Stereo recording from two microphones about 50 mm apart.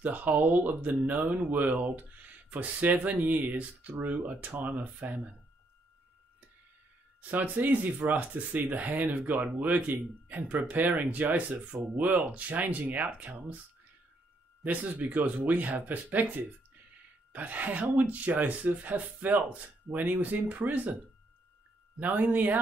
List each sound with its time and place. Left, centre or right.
0.0 s speech: right
7.2 s speech: right
14.6 s speech: right
22.0 s speech: right